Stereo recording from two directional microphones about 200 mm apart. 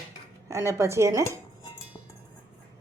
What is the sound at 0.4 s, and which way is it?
Speech, 15° right (ahead or behind).